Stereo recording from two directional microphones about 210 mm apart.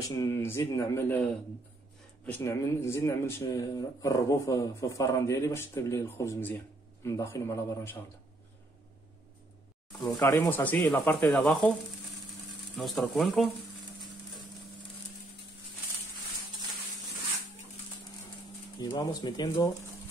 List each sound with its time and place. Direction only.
0.1 s speech: 15° left (ahead or behind)
9.9 s speech: 15° left (ahead or behind)
12.7 s speech: centre (ahead or behind)
18.8 s speech: 20° left (ahead or behind)